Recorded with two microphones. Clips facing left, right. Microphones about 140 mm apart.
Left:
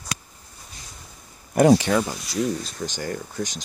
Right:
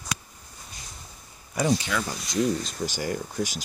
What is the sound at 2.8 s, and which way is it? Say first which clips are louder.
Speech: even; 10° right (ahead or behind).